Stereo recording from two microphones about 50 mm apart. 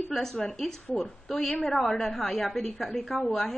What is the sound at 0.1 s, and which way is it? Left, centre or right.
A woman's voice, centre.